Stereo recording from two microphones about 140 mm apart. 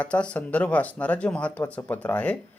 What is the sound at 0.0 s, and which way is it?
Speech, 10° left (ahead or behind).